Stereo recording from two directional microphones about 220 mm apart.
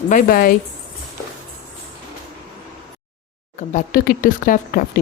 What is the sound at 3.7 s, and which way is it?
A woman's voice, 40° left (ahead or behind).